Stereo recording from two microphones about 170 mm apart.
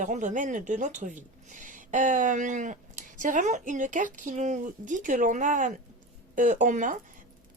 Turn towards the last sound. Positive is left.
turn(degrees=-50)  # may be behind; listen again after turning